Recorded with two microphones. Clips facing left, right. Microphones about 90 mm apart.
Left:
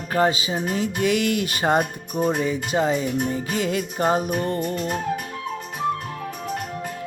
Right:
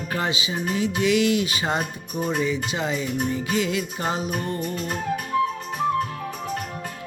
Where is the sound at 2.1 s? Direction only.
35° left (ahead or behind).